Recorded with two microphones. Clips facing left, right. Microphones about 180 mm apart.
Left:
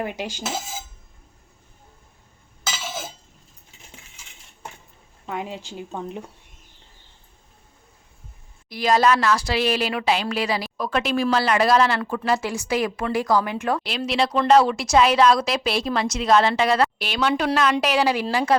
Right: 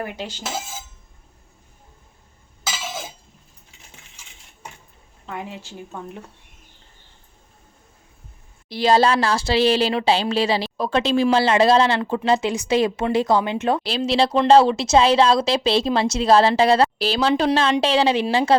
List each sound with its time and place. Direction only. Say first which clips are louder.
0.0 s cutlery: left 1 dB; 15° left (ahead or behind)
5.2 s speech: left 2 dB; 15° left (ahead or behind)
8.7 s speech: right 2 dB; 30° right (ahead or behind)